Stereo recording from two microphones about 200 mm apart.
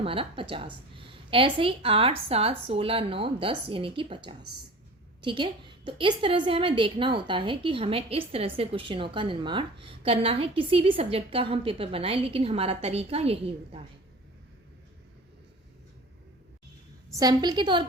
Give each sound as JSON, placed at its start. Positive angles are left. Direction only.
{"t": 0.0, "sound": "a woman's voice", "side_deg": -25}
{"t": 17.1, "sound": "a woman's voice", "side_deg": -20}